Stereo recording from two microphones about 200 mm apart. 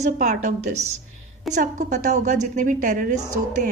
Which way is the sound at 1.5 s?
40° right (ahead or behind).